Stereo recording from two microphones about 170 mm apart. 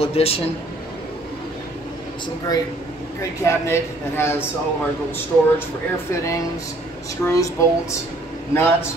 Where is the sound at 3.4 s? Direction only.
15° left (ahead or behind).